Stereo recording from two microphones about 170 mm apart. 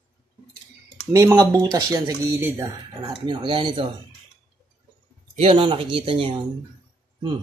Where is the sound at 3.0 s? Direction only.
30° right (ahead or behind).